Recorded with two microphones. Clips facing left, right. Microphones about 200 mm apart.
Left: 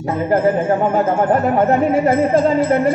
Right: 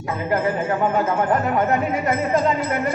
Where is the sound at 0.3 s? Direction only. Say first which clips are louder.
Left 6 dB; 30° left (ahead or behind).